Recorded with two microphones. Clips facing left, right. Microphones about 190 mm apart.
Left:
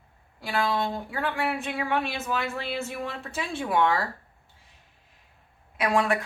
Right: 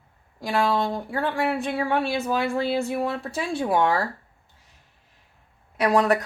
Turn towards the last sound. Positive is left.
turn(degrees=-40)  # may be behind; listen again after turning